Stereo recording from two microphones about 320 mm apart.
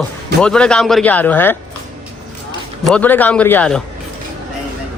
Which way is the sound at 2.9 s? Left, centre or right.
Centre.